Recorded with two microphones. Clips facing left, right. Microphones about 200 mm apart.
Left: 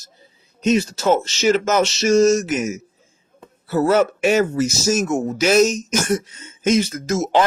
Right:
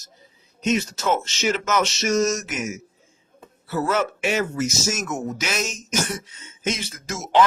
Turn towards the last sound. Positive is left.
turn(degrees=40)  # may be behind; listen again after turning